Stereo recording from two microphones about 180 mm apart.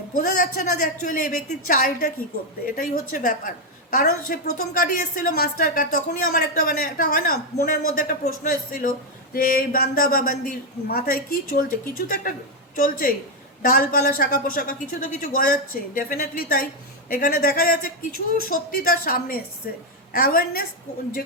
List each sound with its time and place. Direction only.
0.2 s a woman's voice: 50° left (ahead or behind)